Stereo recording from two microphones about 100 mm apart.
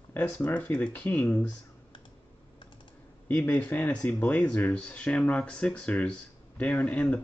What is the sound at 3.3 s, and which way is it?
Speech, 20° left (ahead or behind).